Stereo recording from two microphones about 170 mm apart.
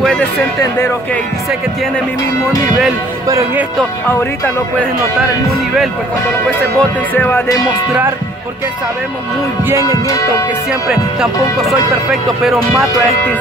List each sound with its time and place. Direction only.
0.0 s speech: 5° left (ahead or behind)
3.3 s speech: 20° right (ahead or behind)
6.8 s speech: 10° left (ahead or behind)
9.8 s music: 20° left (ahead or behind)
10.7 s speech: 5° right (ahead or behind)